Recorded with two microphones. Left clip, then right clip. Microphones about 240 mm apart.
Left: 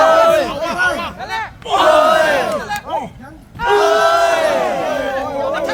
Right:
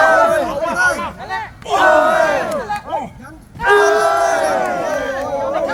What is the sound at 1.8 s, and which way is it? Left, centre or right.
Battle cry, left.